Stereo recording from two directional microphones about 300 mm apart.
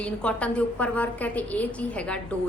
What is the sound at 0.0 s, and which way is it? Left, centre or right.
A woman's voice, centre.